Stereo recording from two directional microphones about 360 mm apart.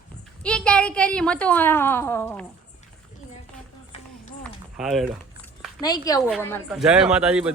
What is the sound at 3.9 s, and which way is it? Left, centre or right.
Run, centre.